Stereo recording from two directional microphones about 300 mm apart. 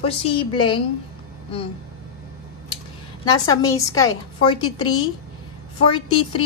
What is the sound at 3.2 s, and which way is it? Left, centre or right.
A woman's voice, centre.